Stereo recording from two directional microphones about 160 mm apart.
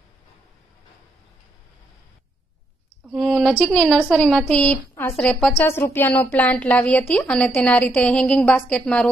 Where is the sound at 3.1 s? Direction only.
Centre (ahead or behind).